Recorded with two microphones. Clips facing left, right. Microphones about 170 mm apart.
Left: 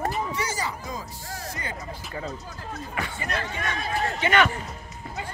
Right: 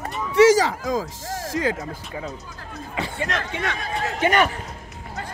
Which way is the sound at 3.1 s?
80° right.